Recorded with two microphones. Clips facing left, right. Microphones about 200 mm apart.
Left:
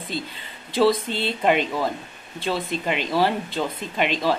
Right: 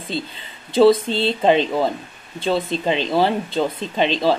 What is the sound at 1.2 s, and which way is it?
Speech, 25° right (ahead or behind).